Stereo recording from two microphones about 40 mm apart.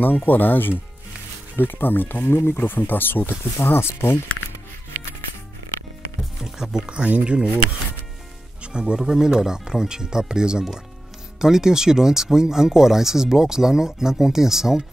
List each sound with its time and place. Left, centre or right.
0.0 s speech: left
4.9 s music: right
6.4 s music: centre
7.1 s speech: right
8.7 s speech: right